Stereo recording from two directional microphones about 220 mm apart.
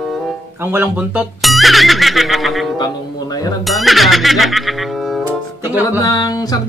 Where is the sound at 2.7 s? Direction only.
15° left (ahead or behind).